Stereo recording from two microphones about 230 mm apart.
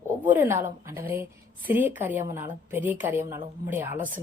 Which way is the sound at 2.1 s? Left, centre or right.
Right.